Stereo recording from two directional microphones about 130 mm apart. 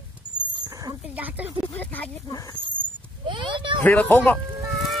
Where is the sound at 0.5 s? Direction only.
35° right (ahead or behind).